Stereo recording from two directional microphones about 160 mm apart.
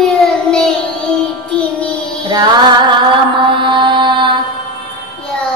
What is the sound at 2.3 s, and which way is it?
Mantra, 30° right (ahead or behind).